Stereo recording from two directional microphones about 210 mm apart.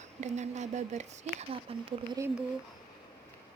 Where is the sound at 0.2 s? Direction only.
35° right (ahead or behind).